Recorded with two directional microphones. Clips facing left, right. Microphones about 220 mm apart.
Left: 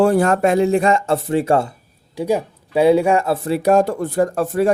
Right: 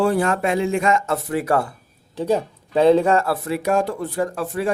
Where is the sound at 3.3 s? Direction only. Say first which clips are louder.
Left 5 dB; 30° left (ahead or behind).